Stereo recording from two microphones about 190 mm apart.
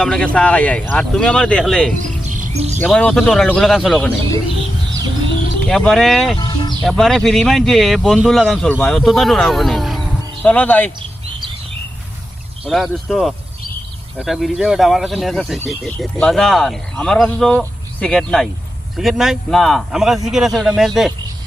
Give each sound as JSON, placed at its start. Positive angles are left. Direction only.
{"t": 0.0, "sound": "speech", "side_deg": 5}
{"t": 2.0, "sound": "music", "side_deg": -40}
{"t": 2.8, "sound": "speech", "side_deg": 5}
{"t": 5.6, "sound": "speech", "side_deg": 0}
{"t": 6.4, "sound": "a sound", "side_deg": 25}
{"t": 6.8, "sound": "speech", "side_deg": 0}
{"t": 12.6, "sound": "speech", "side_deg": 0}